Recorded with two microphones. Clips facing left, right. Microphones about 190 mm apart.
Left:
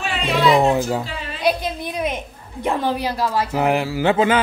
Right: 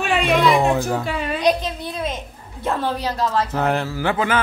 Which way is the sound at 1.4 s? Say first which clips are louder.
Left 1 dB; 10° left (ahead or behind).